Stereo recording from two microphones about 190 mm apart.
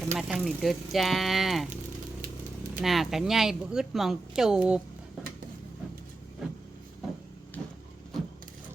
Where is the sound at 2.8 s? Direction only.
Centre (ahead or behind).